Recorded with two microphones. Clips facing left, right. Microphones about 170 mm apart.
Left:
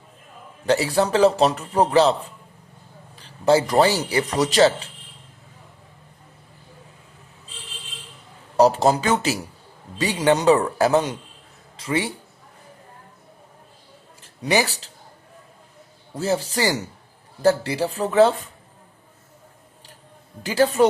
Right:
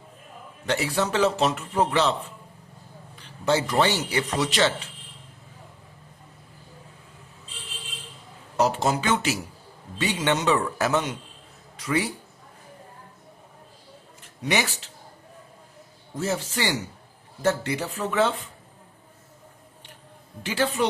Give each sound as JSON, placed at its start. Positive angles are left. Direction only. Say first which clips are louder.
{"t": 0.6, "sound": "a man's voice", "louder": "left 6 dB", "side_deg": 35}
{"t": 3.2, "sound": "a man's voice", "louder": "left 6 dB", "side_deg": 35}
{"t": 8.5, "sound": "a man's voice", "louder": "left 6 dB", "side_deg": 35}
{"t": 14.2, "sound": "a sound", "louder": "left 5 dB", "side_deg": 35}
{"t": 16.1, "sound": "a man's voice", "louder": "left 4 dB", "side_deg": 35}
{"t": 20.4, "sound": "a man's voice", "louder": "left 7 dB", "side_deg": 35}